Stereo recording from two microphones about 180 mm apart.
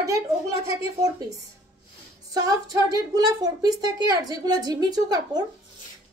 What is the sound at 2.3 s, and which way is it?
A woman's voice, 20° right (ahead or behind).